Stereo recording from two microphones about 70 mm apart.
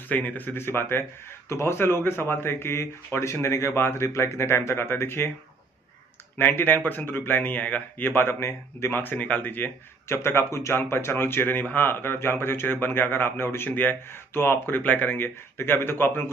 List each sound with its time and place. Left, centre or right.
0.1 s speech: left
6.3 s speech: left
8.2 s speech: left
10.0 s speech: left